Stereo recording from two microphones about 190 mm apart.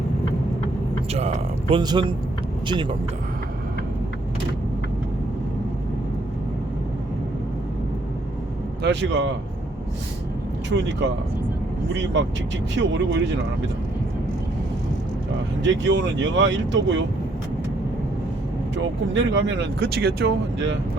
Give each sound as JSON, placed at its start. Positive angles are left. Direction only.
{"t": 1.1, "sound": "speech", "side_deg": -30}
{"t": 8.8, "sound": "speech", "side_deg": -70}
{"t": 10.7, "sound": "speech", "side_deg": -70}
{"t": 12.8, "sound": "speech", "side_deg": -70}
{"t": 15.6, "sound": "speech", "side_deg": -70}
{"t": 18.8, "sound": "speech", "side_deg": -75}